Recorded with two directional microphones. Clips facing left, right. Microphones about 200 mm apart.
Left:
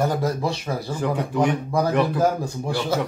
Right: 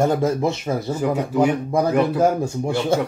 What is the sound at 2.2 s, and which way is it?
Speech, 25° right (ahead or behind).